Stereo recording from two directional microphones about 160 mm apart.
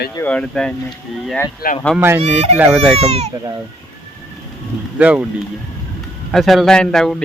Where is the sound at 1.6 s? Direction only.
70° left (ahead or behind).